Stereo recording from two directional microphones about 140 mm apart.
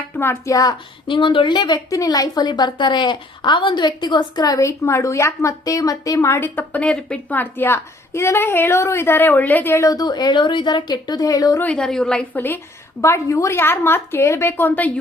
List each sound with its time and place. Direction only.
0.2 s a woman's voice: 20° left (ahead or behind)
11.6 s a woman's voice: 5° left (ahead or behind)